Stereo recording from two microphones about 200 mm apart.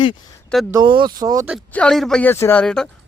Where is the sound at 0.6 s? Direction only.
20° right (ahead or behind).